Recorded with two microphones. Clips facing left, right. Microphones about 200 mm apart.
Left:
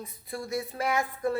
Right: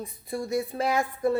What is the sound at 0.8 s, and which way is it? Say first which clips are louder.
Speech: right 1 dB; 30° right (ahead or behind).